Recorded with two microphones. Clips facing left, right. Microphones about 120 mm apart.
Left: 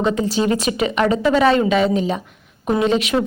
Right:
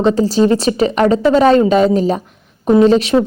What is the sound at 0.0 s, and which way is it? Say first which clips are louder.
A woman's voice: right 6 dB; 35° right (ahead or behind).